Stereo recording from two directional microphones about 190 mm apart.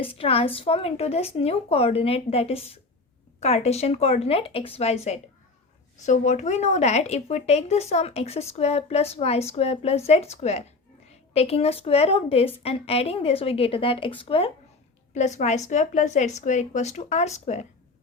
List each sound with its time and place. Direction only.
0.0 s a woman's voice: 30° left (ahead or behind)